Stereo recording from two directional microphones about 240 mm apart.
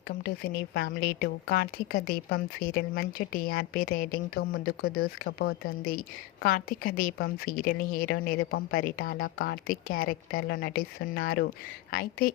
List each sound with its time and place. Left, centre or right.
0.1 s speech: left